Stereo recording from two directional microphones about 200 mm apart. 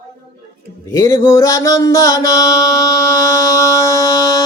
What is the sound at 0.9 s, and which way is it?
Mantra, 15° left (ahead or behind).